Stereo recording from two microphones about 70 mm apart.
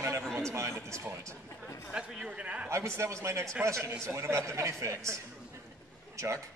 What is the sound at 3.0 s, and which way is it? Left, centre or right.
Speech, right.